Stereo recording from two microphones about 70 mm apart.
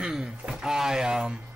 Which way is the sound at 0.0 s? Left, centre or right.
Centre.